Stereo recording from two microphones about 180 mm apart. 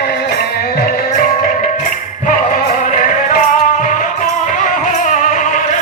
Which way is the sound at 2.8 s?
45° left (ahead or behind).